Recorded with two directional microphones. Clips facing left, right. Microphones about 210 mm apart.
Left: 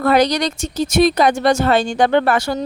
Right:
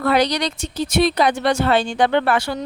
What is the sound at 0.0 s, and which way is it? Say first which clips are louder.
Speech: left 3 dB; 45° left (ahead or behind).